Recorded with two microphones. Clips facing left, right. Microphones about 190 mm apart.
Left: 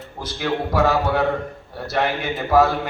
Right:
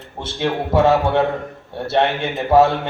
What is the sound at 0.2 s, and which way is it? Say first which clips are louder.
A man's voice: right 2 dB; 25° right (ahead or behind).